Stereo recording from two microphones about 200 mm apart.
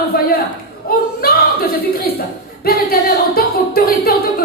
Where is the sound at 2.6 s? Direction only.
50° left (ahead or behind).